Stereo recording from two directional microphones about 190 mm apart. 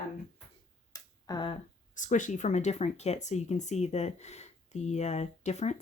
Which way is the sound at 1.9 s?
40° left (ahead or behind).